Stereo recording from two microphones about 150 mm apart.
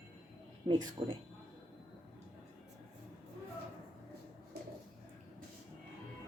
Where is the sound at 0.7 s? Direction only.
25° right (ahead or behind).